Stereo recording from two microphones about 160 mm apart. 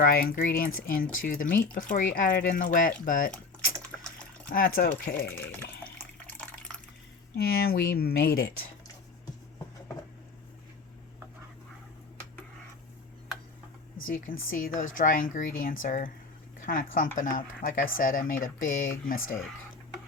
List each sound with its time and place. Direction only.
0.0 s speech: 65° left (ahead or behind)
3.9 s water: 10° left (ahead or behind)
4.4 s speech: 65° left (ahead or behind)
6.2 s water: 10° left (ahead or behind)
7.3 s speech: 70° left (ahead or behind)
14.1 s speech: 60° left (ahead or behind)